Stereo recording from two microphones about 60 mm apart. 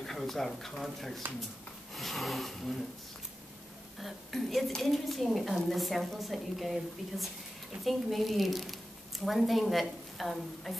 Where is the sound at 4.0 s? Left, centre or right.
Centre.